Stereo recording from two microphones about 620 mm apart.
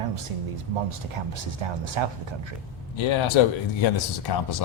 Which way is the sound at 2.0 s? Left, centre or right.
Right.